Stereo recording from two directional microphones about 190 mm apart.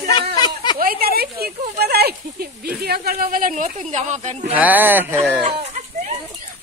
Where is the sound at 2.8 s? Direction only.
55° right (ahead or behind); by 4.5 s 40° right (ahead or behind).